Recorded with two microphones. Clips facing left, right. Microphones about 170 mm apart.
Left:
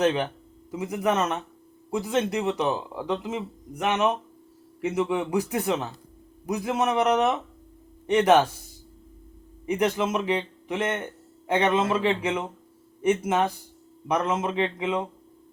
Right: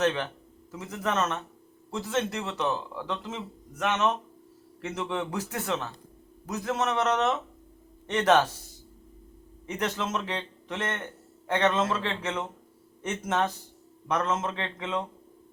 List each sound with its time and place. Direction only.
0.0 s speech: 15° left (ahead or behind)
9.6 s speech: 15° left (ahead or behind)